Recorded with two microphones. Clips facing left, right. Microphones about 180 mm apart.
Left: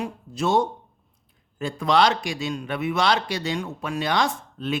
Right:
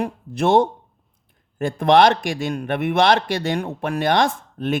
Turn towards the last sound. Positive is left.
turn(degrees=-50)  # may be behind; listen again after turning